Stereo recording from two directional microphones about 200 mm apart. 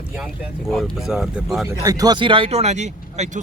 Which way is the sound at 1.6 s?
15° right (ahead or behind).